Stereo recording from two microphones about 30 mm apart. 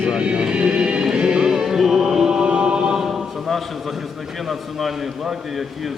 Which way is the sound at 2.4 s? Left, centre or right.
Right.